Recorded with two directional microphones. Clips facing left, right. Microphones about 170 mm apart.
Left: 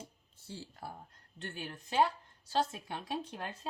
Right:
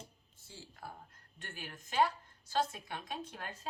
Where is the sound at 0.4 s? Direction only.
35° left (ahead or behind).